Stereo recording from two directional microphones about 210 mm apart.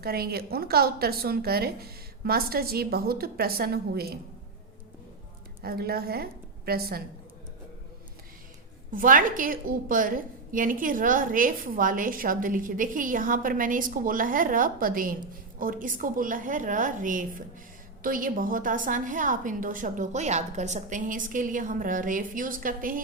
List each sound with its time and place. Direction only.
0.0 s a woman's voice: 45° right (ahead or behind)
5.6 s a woman's voice: 45° right (ahead or behind)
8.9 s a woman's voice: 40° right (ahead or behind)